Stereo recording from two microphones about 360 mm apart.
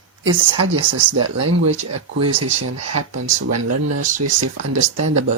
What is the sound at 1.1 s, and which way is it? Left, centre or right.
Speech, right.